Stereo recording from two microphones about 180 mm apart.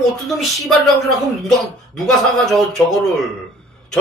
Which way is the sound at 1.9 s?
Centre (ahead or behind).